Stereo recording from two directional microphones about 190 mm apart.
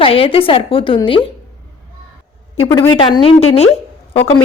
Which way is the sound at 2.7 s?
20° left (ahead or behind).